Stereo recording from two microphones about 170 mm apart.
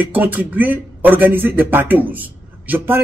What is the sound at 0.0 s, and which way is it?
Speech, 10° right (ahead or behind).